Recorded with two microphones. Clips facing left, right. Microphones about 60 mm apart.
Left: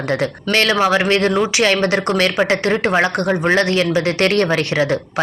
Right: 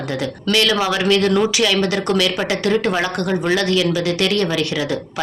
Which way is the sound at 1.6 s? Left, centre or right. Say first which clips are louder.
Left 2 dB; left.